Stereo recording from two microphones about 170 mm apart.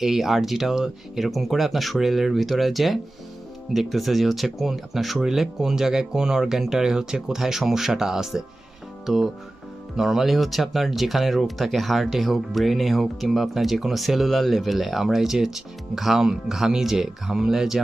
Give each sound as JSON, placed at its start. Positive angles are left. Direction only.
{"t": 0.0, "sound": "speech", "side_deg": 0}